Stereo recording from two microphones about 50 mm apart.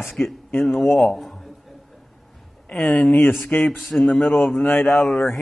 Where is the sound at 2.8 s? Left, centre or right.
Left.